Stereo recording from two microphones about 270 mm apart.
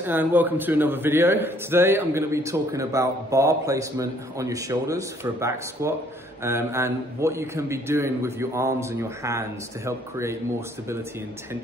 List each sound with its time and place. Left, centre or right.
0.0 s a man's voice: centre